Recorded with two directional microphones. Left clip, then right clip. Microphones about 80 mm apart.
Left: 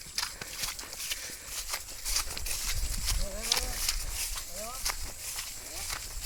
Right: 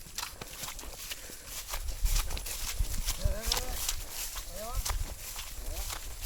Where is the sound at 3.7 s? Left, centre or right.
Centre.